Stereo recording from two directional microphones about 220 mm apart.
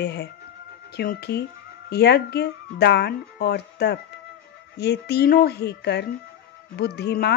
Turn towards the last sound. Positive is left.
turn(degrees=50)  # may be behind; listen again after turning